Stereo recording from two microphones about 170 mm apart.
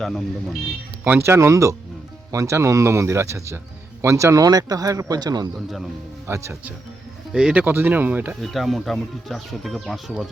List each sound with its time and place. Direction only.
0.0 s speech: centre (ahead or behind)
1.0 s speech: 15° right (ahead or behind)
7.3 s speech: 5° right (ahead or behind)
8.4 s speech: centre (ahead or behind)